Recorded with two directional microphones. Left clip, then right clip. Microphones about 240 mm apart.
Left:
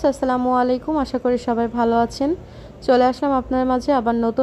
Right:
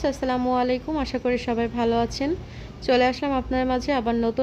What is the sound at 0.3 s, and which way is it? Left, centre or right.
A woman's voice, centre.